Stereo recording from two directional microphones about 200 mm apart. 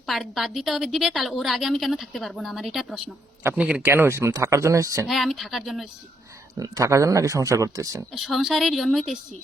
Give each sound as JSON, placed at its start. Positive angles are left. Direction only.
{"t": 0.0, "sound": "a woman's voice", "side_deg": 0}
{"t": 5.0, "sound": "a woman's voice", "side_deg": 0}
{"t": 6.6, "sound": "speech", "side_deg": -15}
{"t": 8.1, "sound": "a woman's voice", "side_deg": 0}